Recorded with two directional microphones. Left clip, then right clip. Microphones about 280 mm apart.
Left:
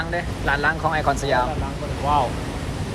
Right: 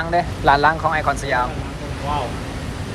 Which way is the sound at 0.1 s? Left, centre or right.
Centre.